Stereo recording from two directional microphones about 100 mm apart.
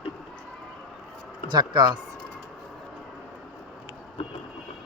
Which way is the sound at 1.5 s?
50° right (ahead or behind).